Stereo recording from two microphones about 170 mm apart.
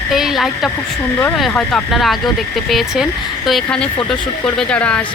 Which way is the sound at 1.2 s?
Centre (ahead or behind).